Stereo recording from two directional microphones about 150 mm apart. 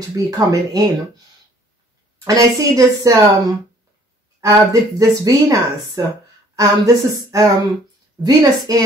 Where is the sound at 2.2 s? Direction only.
25° right (ahead or behind).